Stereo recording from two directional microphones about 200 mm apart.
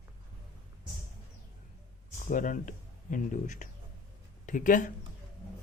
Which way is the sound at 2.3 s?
40° left (ahead or behind).